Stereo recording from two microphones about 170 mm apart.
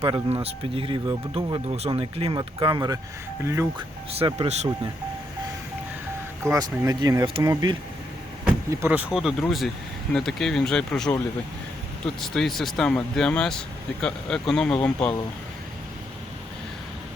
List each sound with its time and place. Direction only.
0.0 s speech: 30° right (ahead or behind); by 3.7 s 15° right (ahead or behind)
3.8 s speech: 30° right (ahead or behind)
6.4 s speech: 15° right (ahead or behind)
9.1 s speech: centre (ahead or behind)